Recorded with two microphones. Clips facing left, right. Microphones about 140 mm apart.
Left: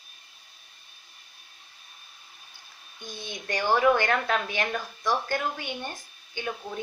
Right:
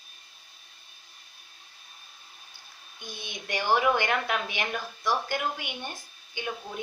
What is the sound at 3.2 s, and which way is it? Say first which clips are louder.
A woman's voice: left 2 dB; 15° right (ahead or behind).